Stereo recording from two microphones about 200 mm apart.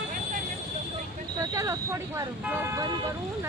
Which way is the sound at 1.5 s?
15° right (ahead or behind).